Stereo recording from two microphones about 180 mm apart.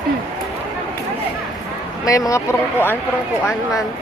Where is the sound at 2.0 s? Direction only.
20° left (ahead or behind).